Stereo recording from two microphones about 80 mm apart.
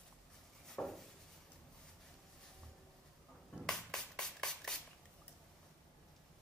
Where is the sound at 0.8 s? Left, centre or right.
Centre.